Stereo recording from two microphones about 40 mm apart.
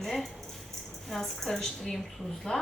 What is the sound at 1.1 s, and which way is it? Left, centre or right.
A woman's voice, centre.